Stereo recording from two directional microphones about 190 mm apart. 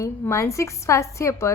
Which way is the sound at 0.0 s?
15° left (ahead or behind).